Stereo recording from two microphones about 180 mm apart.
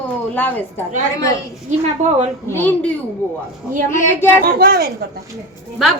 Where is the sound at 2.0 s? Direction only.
40° right (ahead or behind).